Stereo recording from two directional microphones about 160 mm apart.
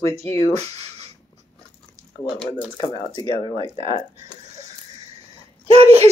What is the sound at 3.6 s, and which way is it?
Speech, 35° right (ahead or behind).